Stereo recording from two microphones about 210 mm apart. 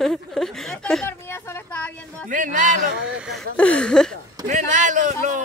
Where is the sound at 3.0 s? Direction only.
5° right (ahead or behind).